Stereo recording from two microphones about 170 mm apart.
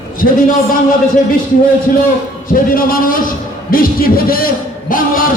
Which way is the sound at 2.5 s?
55° left (ahead or behind).